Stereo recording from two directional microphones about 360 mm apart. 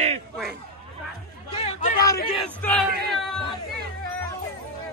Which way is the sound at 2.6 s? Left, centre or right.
Centre.